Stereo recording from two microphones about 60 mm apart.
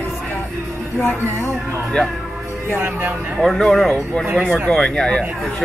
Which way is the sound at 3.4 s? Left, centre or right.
Centre.